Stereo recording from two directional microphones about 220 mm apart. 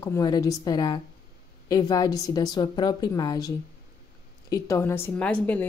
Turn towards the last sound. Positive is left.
turn(degrees=5)  # may be behind; listen again after turning